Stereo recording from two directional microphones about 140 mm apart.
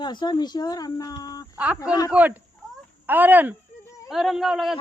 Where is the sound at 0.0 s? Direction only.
30° left (ahead or behind).